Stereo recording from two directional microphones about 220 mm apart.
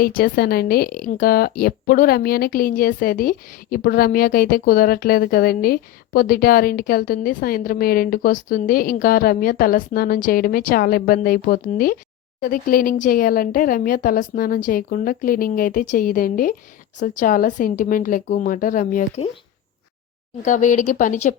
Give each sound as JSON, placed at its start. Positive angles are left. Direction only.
{"t": 0.0, "sound": "a woman's voice", "side_deg": 40}
{"t": 20.4, "sound": "a woman's voice", "side_deg": 35}